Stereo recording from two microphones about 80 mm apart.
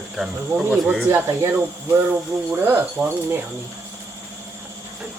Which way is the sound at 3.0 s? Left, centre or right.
Centre.